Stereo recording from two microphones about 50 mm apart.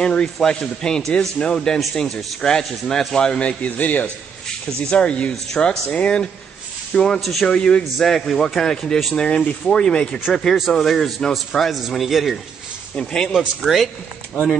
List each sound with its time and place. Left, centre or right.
0.0 s speech: centre
4.8 s speech: left
7.2 s speech: centre
7.4 s speech: centre
8.0 s speech: centre
12.9 s speech: centre
13.6 s speech: centre